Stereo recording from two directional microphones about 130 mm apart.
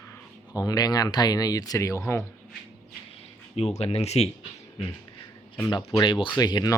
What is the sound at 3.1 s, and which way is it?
Speech, 55° left (ahead or behind).